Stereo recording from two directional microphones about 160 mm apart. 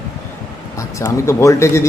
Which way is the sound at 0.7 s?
20° left (ahead or behind).